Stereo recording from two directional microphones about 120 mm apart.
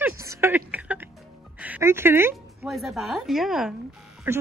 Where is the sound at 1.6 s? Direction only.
15° right (ahead or behind).